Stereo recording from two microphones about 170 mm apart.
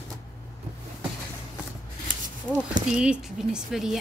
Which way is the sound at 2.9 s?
5° right (ahead or behind).